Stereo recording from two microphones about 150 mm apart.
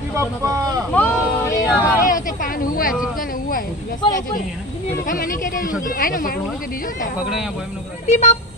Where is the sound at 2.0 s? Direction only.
65° left (ahead or behind).